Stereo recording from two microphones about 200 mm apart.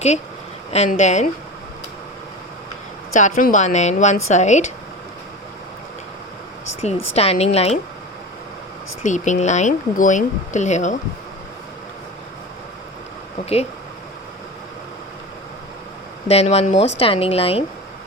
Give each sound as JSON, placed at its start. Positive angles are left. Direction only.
{"t": 0.7, "sound": "a woman's voice", "side_deg": 35}
{"t": 3.2, "sound": "a woman's voice", "side_deg": 40}
{"t": 7.2, "sound": "a woman's voice", "side_deg": 30}
{"t": 9.0, "sound": "a woman's voice", "side_deg": 35}
{"t": 13.4, "sound": "a woman's voice", "side_deg": 30}
{"t": 16.3, "sound": "a woman's voice", "side_deg": 30}